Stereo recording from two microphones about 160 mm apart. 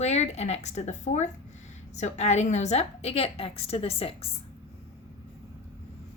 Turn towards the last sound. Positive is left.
turn(degrees=35)  # may be behind; listen again after turning